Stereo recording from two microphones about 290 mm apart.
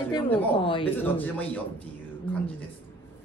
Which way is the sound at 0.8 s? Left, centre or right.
Centre.